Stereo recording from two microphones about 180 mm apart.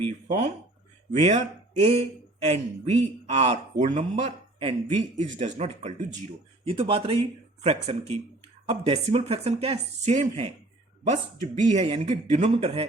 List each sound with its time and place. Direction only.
0.3 s speech: 40° right (ahead or behind)
11.5 s speech: 40° right (ahead or behind)